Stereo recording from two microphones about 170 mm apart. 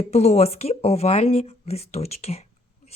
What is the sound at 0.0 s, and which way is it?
Speech, 40° left (ahead or behind).